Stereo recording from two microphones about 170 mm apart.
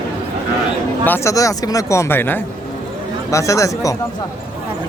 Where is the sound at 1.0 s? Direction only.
15° left (ahead or behind).